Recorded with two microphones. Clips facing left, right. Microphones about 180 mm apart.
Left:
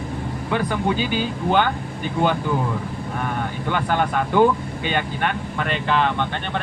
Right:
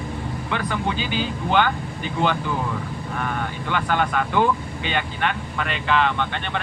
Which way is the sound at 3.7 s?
45° left (ahead or behind).